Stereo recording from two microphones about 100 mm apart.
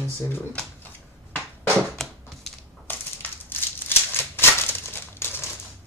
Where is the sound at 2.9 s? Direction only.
20° left (ahead or behind).